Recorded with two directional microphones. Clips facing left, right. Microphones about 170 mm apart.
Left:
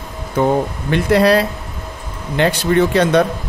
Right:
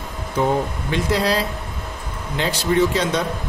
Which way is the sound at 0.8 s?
60° left (ahead or behind).